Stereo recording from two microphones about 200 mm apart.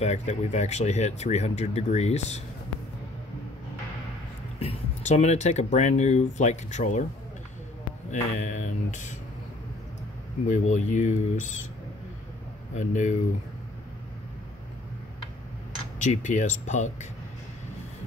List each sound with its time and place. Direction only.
0.0 s speech: 35° left (ahead or behind)
4.6 s speech: 30° left (ahead or behind)
8.1 s speech: 35° left (ahead or behind)
10.5 s speech: 35° left (ahead or behind)
12.7 s speech: 35° left (ahead or behind)
16.0 s speech: 40° left (ahead or behind)